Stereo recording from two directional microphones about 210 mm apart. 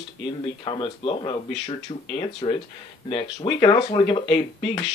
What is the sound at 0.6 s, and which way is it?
Speech, 25° left (ahead or behind).